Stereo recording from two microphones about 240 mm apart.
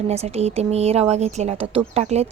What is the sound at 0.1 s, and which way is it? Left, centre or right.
A woman's voice, right.